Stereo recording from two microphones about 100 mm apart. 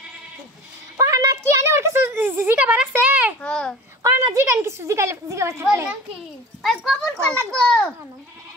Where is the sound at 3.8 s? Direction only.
25° right (ahead or behind).